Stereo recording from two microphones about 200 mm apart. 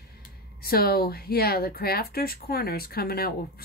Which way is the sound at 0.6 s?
50° left (ahead or behind).